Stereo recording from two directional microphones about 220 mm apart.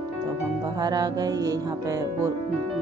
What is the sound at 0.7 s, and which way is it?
Speech, 15° right (ahead or behind).